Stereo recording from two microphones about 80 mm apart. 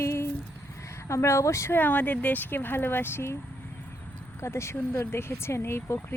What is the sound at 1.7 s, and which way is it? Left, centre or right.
Speech, left.